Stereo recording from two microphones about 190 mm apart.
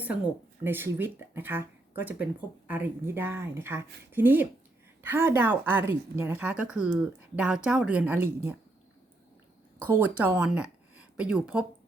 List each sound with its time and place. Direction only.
0.6 s speech: 10° right (ahead or behind)
9.7 s speech: 10° right (ahead or behind)